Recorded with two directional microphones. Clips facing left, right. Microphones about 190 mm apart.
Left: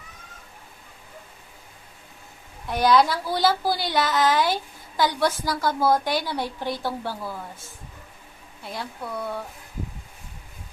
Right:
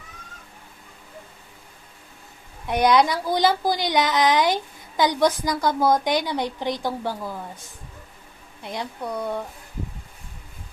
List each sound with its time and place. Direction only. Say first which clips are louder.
2.6 s a woman's voice: right 1 dB; 20° right (ahead or behind)
8.6 s a woman's voice: right 3 dB; 20° right (ahead or behind)